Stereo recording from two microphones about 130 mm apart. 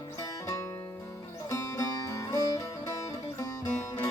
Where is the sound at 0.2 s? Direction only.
20° left (ahead or behind).